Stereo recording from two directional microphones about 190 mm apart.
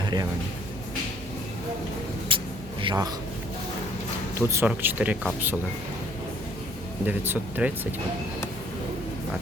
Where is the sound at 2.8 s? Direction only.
25° right (ahead or behind).